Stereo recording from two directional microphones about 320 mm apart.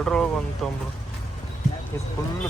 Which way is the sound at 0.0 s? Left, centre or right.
Centre.